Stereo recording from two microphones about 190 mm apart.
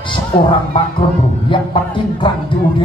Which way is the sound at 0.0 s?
25° left (ahead or behind).